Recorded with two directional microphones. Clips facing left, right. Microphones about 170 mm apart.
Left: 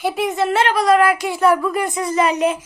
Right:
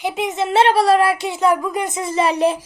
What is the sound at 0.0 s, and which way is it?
Speech, 20° right (ahead or behind).